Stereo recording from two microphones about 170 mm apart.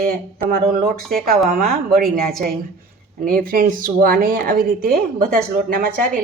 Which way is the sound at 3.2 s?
55° right (ahead or behind).